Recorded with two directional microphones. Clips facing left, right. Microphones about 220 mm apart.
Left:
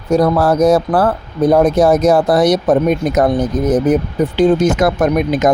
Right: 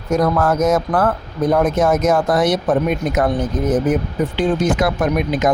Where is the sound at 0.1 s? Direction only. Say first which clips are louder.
Left 4 dB; 35° left (ahead or behind).